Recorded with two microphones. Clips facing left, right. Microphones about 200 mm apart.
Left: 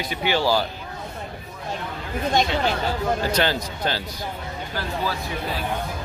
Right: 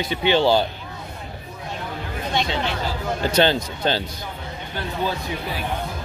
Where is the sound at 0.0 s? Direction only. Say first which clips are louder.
Right 4 dB; 25° right (ahead or behind).